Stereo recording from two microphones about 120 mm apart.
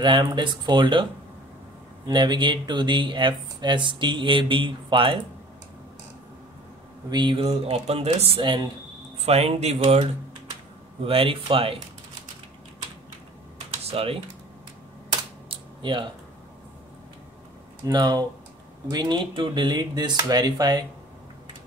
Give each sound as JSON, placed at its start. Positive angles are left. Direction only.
{"t": 0.0, "sound": "speech", "side_deg": -40}
{"t": 2.0, "sound": "speech", "side_deg": -35}
{"t": 7.1, "sound": "speech", "side_deg": -40}
{"t": 7.4, "sound": "speech", "side_deg": -60}
{"t": 9.2, "sound": "speech", "side_deg": -60}
{"t": 11.1, "sound": "speech", "side_deg": -50}
{"t": 13.8, "sound": "speech", "side_deg": -50}
{"t": 15.4, "sound": "a sound", "side_deg": -45}
{"t": 17.8, "sound": "speech", "side_deg": -35}